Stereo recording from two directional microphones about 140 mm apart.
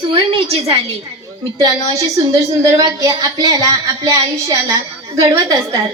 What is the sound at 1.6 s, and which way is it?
A woman's voice, 25° right (ahead or behind).